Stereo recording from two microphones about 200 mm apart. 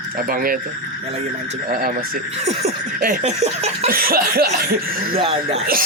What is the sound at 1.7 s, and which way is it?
Speech, 45° right (ahead or behind).